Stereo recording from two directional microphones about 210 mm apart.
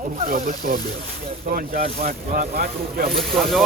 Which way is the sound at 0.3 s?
40° right (ahead or behind).